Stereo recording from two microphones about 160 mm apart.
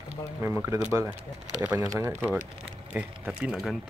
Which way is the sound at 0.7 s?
15° right (ahead or behind).